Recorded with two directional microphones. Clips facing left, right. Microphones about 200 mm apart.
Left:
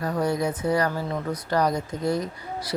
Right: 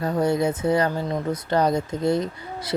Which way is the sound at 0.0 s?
25° right (ahead or behind).